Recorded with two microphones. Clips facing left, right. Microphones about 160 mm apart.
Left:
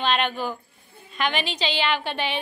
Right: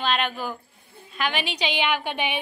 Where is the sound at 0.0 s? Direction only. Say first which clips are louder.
Left 2 dB; 5° right (ahead or behind).